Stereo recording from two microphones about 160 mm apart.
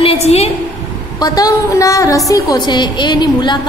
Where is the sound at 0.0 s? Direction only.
40° left (ahead or behind).